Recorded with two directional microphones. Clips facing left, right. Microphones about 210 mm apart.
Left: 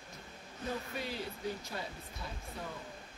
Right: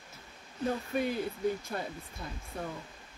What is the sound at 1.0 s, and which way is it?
Speech, 50° right (ahead or behind).